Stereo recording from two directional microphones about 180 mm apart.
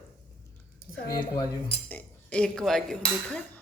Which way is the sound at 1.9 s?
5° left (ahead or behind).